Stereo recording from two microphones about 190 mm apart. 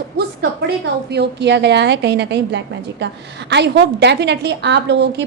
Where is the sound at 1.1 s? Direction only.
60° right (ahead or behind).